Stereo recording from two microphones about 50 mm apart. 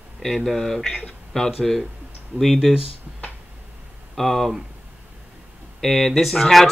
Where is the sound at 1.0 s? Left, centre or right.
Centre.